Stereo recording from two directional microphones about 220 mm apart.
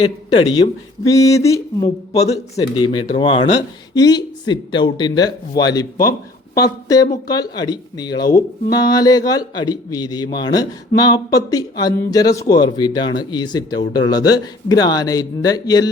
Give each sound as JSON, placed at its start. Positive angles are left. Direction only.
{"t": 0.0, "sound": "speech", "side_deg": 20}
{"t": 2.2, "sound": "speech", "side_deg": 30}